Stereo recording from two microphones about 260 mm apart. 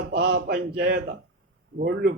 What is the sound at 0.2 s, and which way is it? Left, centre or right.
Speech, right.